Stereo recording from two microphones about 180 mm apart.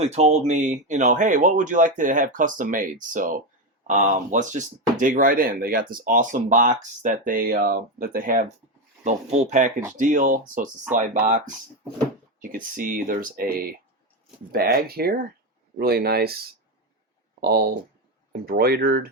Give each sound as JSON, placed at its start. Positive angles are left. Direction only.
{"t": 0.0, "sound": "speech", "side_deg": -35}
{"t": 17.4, "sound": "speech", "side_deg": -60}